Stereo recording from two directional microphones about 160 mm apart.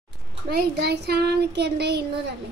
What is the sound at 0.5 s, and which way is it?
Speech, 90° right.